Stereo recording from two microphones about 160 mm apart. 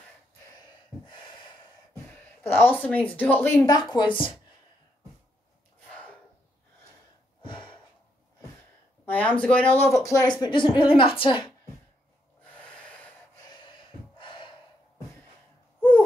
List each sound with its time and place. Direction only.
2.4 s speech: 10° left (ahead or behind); by 4.3 s 30° left (ahead or behind)
7.4 s gasp: 30° left (ahead or behind)
9.0 s speech: 10° left (ahead or behind)
10.4 s a woman's voice: 30° left (ahead or behind)
14.1 s gasp: 30° left (ahead or behind)